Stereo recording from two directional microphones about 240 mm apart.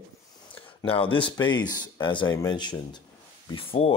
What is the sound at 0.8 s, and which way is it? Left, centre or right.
Speech, left.